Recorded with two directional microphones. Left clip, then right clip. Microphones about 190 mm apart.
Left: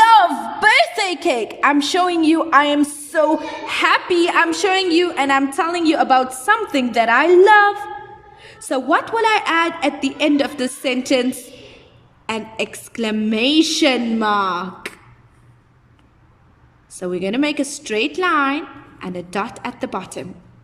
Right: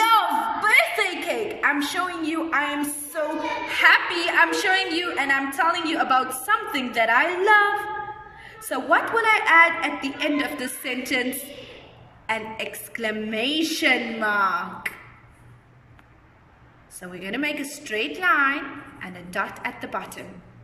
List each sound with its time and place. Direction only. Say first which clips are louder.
0.0 s a sound: left 8 dB; 50° left (ahead or behind)
3.7 s a woman's voice: left 2 dB; 50° left (ahead or behind)
16.9 s a woman's voice: left 10 dB; 50° left (ahead or behind)